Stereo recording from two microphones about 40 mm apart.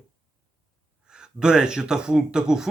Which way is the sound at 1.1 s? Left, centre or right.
Centre.